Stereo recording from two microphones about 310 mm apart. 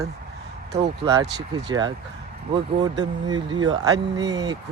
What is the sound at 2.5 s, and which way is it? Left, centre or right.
Speech, centre.